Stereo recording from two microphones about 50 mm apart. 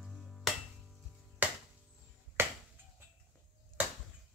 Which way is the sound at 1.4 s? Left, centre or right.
Right.